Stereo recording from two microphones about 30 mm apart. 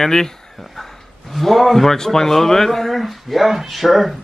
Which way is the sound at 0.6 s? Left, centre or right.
Centre.